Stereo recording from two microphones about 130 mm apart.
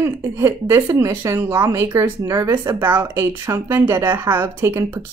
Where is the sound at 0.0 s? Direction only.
20° right (ahead or behind).